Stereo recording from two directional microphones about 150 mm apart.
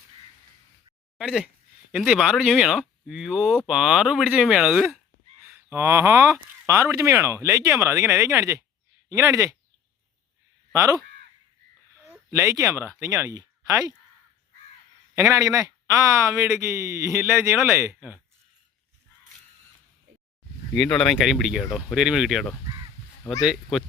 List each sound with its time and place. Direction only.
1.2 s speech: 5° right (ahead or behind)
5.4 s speech: 15° right (ahead or behind)
10.7 s speech: 20° right (ahead or behind)
12.3 s speech: 20° right (ahead or behind)
15.1 s speech: 20° right (ahead or behind)
20.7 s speech: 5° left (ahead or behind)